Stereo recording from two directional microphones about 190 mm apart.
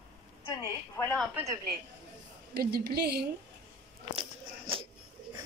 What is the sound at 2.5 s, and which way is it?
Speech, 55° right (ahead or behind).